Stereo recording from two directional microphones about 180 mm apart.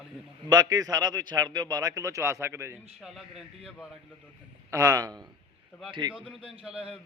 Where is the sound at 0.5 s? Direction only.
20° right (ahead or behind).